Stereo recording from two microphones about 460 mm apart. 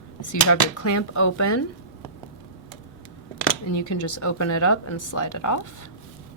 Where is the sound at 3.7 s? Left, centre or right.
Left.